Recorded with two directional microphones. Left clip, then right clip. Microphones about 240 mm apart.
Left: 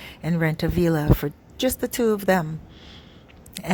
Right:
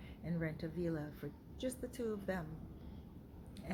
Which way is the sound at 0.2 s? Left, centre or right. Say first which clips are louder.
Left 18 dB; left.